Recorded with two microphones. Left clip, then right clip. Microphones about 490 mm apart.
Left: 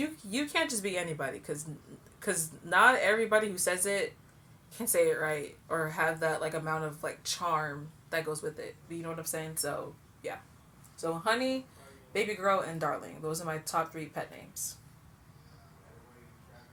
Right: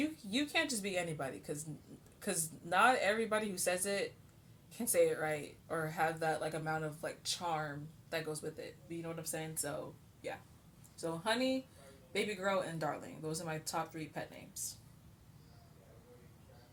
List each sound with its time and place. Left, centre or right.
0.3 s speech: right
10.9 s speech: right